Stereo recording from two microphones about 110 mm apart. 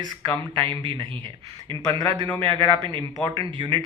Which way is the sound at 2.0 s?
40° right (ahead or behind).